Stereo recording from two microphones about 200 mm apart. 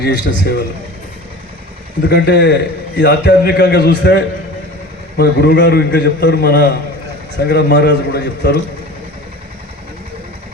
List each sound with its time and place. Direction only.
0.0 s a man's voice: 55° left (ahead or behind)
2.0 s a man's voice: 55° left (ahead or behind)